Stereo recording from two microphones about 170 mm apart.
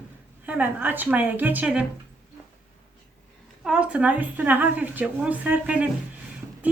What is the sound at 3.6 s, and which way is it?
A woman's voice, 5° right (ahead or behind).